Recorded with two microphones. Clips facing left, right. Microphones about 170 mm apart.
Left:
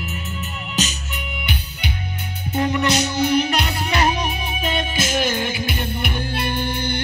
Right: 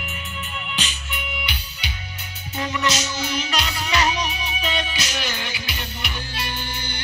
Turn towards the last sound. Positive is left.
turn(degrees=55)  # may be behind; listen again after turning